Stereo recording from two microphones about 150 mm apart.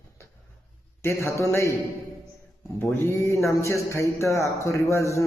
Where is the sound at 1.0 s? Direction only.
15° left (ahead or behind).